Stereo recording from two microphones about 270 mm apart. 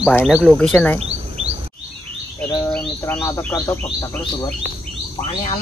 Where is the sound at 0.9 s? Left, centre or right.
Right.